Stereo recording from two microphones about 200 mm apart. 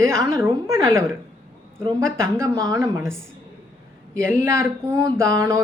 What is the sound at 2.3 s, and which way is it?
Speech, 15° right (ahead or behind).